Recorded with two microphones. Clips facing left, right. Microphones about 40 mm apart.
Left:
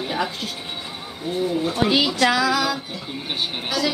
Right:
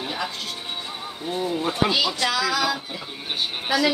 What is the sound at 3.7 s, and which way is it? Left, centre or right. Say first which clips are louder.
Speech: right 3 dB; centre.